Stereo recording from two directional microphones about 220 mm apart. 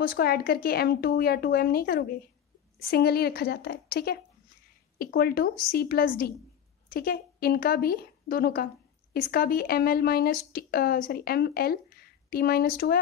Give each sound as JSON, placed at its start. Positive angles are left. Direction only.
{"t": 0.0, "sound": "a woman's voice", "side_deg": 40}